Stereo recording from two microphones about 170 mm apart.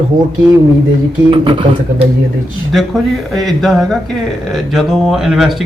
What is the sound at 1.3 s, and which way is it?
Speech, 30° right (ahead or behind).